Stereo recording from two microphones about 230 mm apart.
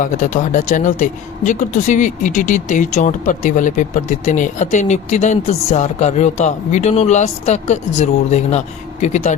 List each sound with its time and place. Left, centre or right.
0.0 s speech: left